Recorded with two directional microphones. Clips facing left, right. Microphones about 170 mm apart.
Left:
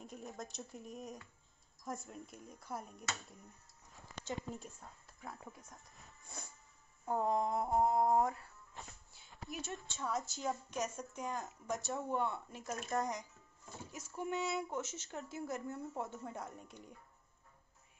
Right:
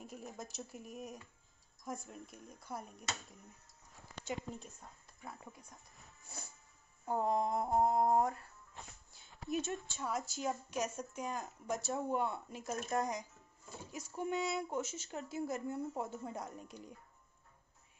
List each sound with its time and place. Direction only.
0.0 s speech: 5° right (ahead or behind)
5.6 s a woman's voice: centre (ahead or behind); by 8.3 s 20° right (ahead or behind)
9.5 s speech: 20° right (ahead or behind)
9.8 s a woman's voice: 10° right (ahead or behind)